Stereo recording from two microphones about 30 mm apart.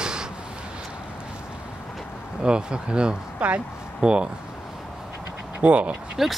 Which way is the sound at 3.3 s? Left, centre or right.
Right.